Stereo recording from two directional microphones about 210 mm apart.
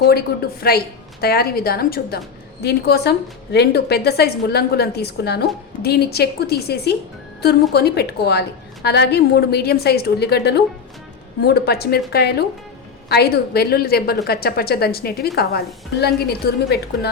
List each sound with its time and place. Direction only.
0.3 s a woman's voice: 50° left (ahead or behind)